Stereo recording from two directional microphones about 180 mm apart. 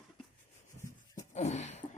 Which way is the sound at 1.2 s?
40° left (ahead or behind).